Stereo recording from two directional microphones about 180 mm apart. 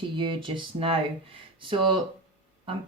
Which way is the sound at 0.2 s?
25° right (ahead or behind).